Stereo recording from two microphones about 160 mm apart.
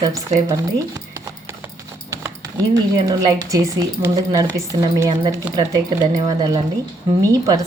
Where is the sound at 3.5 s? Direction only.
20° right (ahead or behind).